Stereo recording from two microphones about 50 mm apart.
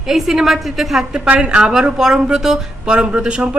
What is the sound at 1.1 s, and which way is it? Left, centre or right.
A woman's voice, centre.